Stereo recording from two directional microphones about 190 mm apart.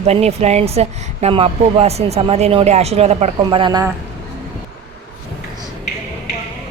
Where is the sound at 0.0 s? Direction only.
35° right (ahead or behind).